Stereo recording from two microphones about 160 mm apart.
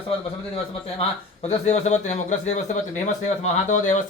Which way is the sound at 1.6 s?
45° left (ahead or behind).